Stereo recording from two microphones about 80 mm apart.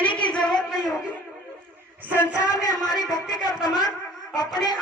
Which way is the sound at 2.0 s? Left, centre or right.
Right.